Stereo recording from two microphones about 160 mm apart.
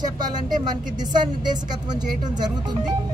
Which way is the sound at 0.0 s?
25° right (ahead or behind).